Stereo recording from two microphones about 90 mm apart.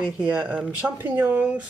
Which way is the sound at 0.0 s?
10° right (ahead or behind).